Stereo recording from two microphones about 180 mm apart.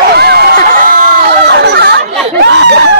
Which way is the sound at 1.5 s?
65° right (ahead or behind).